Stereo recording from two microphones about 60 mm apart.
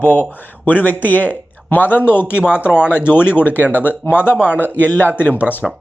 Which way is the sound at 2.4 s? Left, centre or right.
Centre.